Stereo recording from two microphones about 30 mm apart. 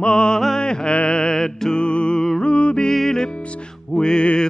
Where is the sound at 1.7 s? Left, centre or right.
Left.